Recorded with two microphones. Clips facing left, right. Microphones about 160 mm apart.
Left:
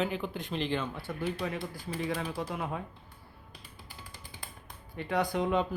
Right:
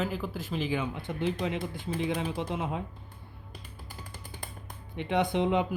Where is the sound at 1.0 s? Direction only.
20° right (ahead or behind).